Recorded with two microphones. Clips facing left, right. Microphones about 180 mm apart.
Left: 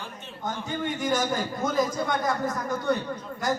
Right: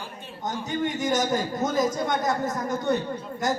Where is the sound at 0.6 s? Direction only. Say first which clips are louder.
Right 2 dB; 20° right (ahead or behind).